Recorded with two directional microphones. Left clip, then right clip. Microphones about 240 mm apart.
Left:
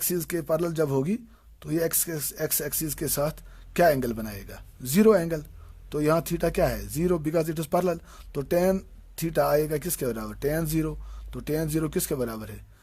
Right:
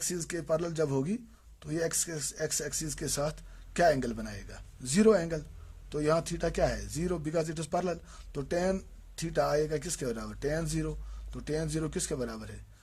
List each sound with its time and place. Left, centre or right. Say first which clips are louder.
0.0 s speech: left 6 dB; left